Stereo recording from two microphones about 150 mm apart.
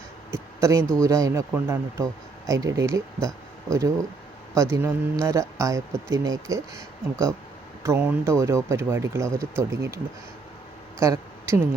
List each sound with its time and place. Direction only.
0.3 s speech: 20° right (ahead or behind)
11.0 s speech: 20° right (ahead or behind)